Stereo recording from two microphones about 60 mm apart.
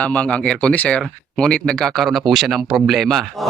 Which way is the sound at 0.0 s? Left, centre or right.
Left.